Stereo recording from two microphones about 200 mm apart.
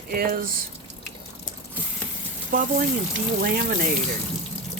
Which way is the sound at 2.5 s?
40° right (ahead or behind).